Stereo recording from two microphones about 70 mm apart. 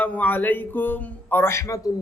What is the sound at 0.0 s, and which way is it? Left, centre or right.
Speech, left.